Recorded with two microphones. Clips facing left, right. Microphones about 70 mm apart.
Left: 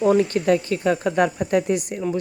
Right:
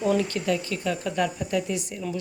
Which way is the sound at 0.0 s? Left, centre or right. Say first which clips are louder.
Left 6 dB; left.